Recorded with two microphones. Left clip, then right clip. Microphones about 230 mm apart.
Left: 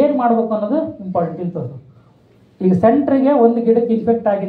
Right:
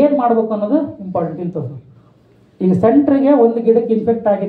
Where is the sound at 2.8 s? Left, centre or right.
Right.